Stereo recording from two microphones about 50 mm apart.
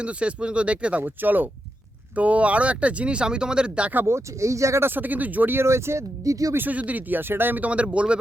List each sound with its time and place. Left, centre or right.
0.0 s speech: right
1.0 s speech: right
4.0 s speech: right
4.8 s speech: right
5.5 s speech: right
6.6 s speech: right
7.6 s speech: right